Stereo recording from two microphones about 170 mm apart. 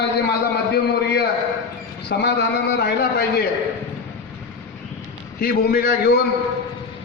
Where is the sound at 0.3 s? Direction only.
70° left (ahead or behind).